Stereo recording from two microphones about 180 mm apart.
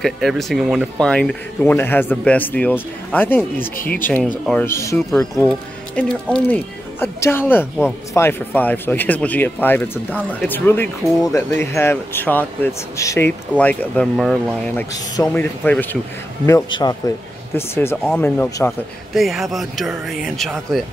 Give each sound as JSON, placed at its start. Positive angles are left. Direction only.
{"t": 0.0, "sound": "speech", "side_deg": 0}
{"t": 3.7, "sound": "speech", "side_deg": 50}
{"t": 4.0, "sound": "speech", "side_deg": 10}
{"t": 16.4, "sound": "speech", "side_deg": 20}
{"t": 19.1, "sound": "speech", "side_deg": 0}